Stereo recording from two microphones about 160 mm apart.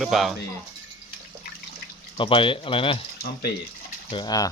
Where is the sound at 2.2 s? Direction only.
30° left (ahead or behind).